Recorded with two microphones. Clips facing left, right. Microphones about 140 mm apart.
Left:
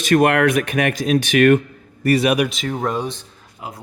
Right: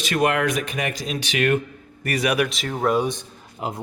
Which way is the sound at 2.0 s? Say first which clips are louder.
Left 7 dB; 30° left (ahead or behind).